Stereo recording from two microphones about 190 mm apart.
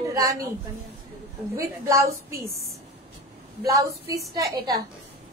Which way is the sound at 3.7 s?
15° right (ahead or behind).